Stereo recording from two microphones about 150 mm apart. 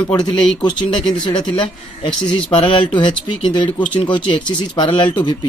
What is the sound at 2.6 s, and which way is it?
Speech, 35° left (ahead or behind).